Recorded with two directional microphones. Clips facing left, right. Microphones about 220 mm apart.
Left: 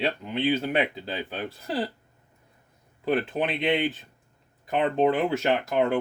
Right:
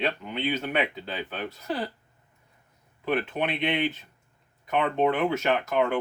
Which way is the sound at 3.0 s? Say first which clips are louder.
Left 2 dB; 30° left (ahead or behind).